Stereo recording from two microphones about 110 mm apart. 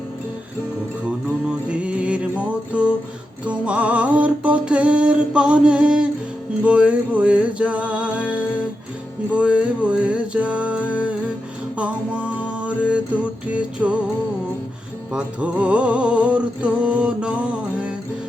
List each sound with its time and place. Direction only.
1.5 s music: 10° right (ahead or behind)
15.1 s music: 10° right (ahead or behind)